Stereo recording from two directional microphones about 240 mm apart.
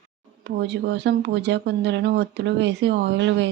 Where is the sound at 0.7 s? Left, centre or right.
Right.